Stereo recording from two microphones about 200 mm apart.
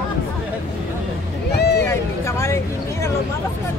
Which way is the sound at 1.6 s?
55° left (ahead or behind).